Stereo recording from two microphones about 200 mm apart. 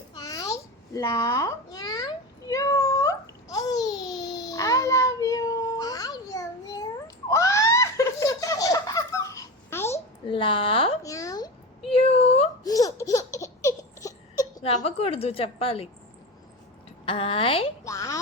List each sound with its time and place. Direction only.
0.1 s babbling: 15° left (ahead or behind)
0.9 s a sound: 15° left (ahead or behind)
7.3 s giggle: 15° left (ahead or behind)
10.2 s a woman's voice: 25° left (ahead or behind)
11.0 s a sound: 15° left (ahead or behind)
11.9 s a sound: 30° left (ahead or behind)
12.6 s laughter: 15° left (ahead or behind)
14.8 s a woman's voice: 30° left (ahead or behind)
17.1 s a woman's voice: 25° left (ahead or behind)
17.8 s speech: 15° left (ahead or behind)